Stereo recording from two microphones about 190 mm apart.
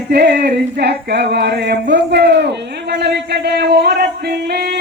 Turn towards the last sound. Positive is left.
turn(degrees=-55)  # may be behind; listen again after turning